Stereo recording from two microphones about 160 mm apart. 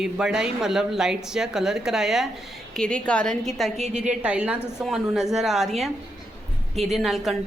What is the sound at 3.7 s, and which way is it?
Speech, 45° right (ahead or behind).